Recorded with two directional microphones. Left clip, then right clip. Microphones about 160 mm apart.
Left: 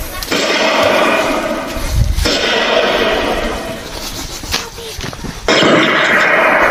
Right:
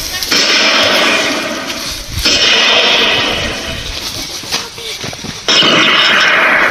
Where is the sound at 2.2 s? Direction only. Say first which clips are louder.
Right 4 dB; 25° left (ahead or behind); by 3.2 s 40° left (ahead or behind).